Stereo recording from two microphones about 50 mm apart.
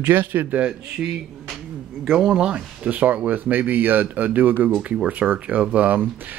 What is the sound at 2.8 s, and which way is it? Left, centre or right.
Speech, right.